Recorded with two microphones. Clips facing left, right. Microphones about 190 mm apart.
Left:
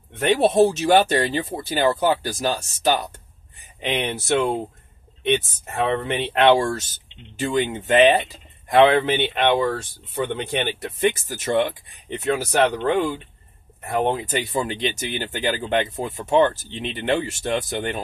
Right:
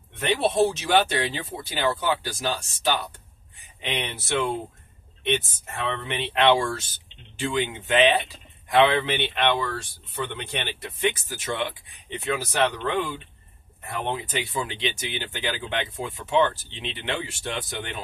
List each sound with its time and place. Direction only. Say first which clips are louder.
0.2 s speech: left 5 dB; 45° left (ahead or behind)
4.0 s speech: left 5 dB; 45° left (ahead or behind)
5.9 s speech: left 4 dB; 50° left (ahead or behind)